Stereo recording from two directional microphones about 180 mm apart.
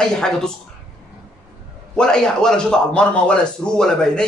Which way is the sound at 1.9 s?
5° left (ahead or behind).